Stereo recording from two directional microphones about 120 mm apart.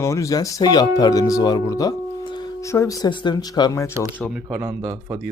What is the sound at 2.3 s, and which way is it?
Music, 40° left (ahead or behind).